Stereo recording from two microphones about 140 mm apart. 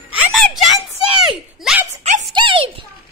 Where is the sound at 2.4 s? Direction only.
40° right (ahead or behind).